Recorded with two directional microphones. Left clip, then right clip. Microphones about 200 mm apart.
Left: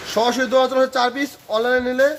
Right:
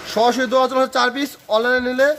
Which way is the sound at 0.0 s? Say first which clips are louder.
Right 2 dB; 10° right (ahead or behind).